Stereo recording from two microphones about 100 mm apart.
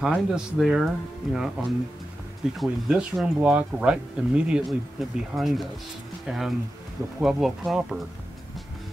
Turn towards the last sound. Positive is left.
turn(degrees=-5)  # may be behind; listen again after turning